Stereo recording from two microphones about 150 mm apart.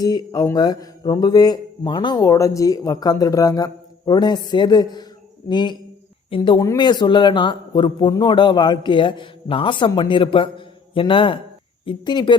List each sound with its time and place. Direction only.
0.0 s speech: 25° left (ahead or behind)